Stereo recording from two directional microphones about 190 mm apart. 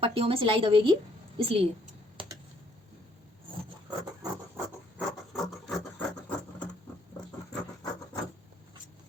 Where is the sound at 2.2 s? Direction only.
25° right (ahead or behind).